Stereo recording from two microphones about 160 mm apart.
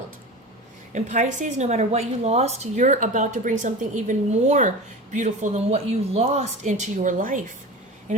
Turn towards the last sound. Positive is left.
turn(degrees=-55)  # may be behind; listen again after turning